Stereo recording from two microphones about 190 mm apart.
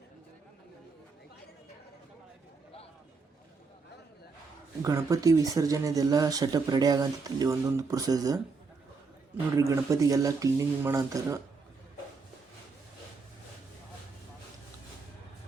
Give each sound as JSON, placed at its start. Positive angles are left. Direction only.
{"t": 4.8, "sound": "speech", "side_deg": -20}
{"t": 9.6, "sound": "speech", "side_deg": -15}